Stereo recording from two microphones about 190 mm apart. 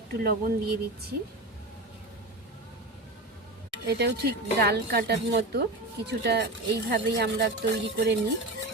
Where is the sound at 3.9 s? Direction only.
60° right (ahead or behind).